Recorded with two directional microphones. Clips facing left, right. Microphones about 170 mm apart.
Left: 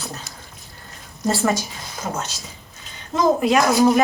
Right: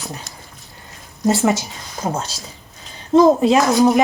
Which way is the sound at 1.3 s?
20° right (ahead or behind).